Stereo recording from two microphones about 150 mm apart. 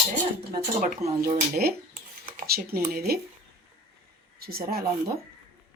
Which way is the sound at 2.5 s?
85° right.